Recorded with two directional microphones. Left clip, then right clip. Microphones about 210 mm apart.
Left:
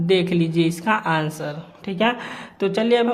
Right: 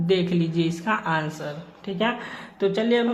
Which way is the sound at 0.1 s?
30° left (ahead or behind).